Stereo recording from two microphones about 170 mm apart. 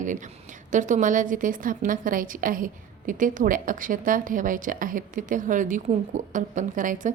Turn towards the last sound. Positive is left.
turn(degrees=-50)  # may be behind; listen again after turning